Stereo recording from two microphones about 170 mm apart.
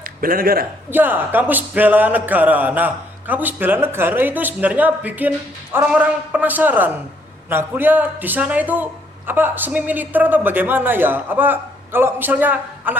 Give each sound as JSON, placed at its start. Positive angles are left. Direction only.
{"t": 0.0, "sound": "a man's voice", "side_deg": -55}
{"t": 0.9, "sound": "a man's voice", "side_deg": -10}